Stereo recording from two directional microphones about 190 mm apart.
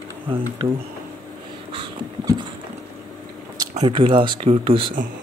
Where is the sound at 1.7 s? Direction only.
25° right (ahead or behind).